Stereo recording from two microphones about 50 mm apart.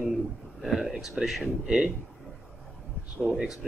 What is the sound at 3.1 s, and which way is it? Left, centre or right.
Speech, centre.